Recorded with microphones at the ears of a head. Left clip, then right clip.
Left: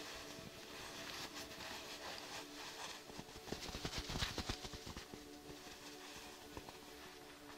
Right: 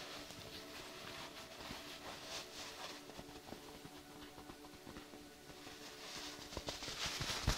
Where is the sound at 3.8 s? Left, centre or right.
Left.